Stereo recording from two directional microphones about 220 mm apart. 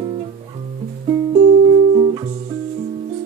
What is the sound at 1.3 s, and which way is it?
Music, 25° right (ahead or behind).